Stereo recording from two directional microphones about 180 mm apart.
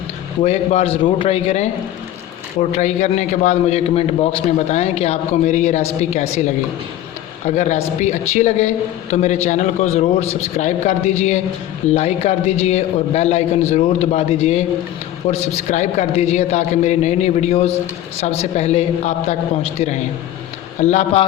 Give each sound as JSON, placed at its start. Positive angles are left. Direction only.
{"t": 0.4, "sound": "a man's voice", "side_deg": 35}